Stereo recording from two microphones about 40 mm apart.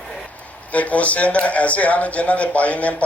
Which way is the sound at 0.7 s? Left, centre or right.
Left.